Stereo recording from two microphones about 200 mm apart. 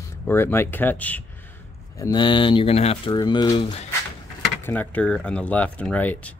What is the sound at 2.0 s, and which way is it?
Speech, 20° left (ahead or behind).